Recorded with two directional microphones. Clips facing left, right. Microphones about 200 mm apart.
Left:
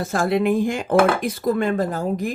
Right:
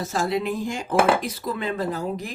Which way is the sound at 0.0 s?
55° left (ahead or behind).